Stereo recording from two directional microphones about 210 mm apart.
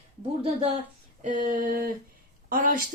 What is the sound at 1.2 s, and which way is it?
A woman's voice, 35° right (ahead or behind).